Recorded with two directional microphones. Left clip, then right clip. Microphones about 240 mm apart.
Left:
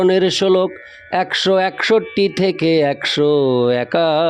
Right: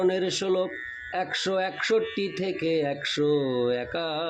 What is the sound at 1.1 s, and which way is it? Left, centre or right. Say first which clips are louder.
Speech: left 12 dB; left.